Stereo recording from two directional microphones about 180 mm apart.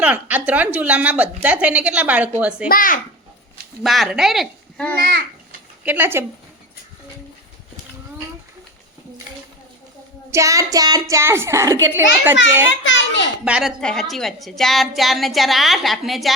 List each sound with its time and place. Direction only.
0.0 s a woman's voice: 10° right (ahead or behind)
2.6 s a child's voice: 50° left (ahead or behind)
3.8 s speech: centre (ahead or behind)
5.8 s a woman's voice: 10° right (ahead or behind)
10.3 s child singing: 15° right (ahead or behind)
11.1 s a woman's voice: 15° right (ahead or behind)
12.8 s a child's voice: 90° left
13.4 s a woman's voice: 5° right (ahead or behind)